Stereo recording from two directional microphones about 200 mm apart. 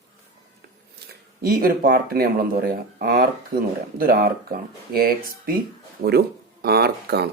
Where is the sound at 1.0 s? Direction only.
50° right (ahead or behind).